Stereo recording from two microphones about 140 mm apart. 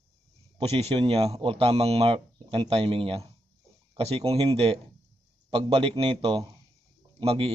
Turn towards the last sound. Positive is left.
turn(degrees=-40)  # may be behind; listen again after turning